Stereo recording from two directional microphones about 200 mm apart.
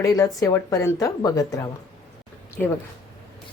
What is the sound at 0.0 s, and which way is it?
A woman's voice, 15° left (ahead or behind).